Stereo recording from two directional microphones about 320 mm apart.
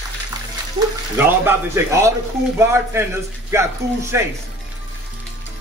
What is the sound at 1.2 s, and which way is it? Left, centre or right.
A man's voice, centre.